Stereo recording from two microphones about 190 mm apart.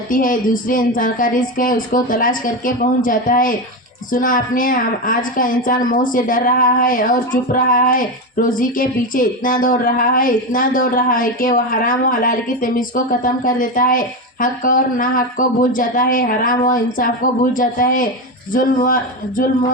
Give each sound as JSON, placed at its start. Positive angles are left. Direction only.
{"t": 0.1, "sound": "a woman's voice", "side_deg": 45}